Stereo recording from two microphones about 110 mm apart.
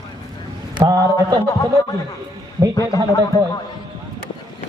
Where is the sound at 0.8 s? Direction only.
35° right (ahead or behind).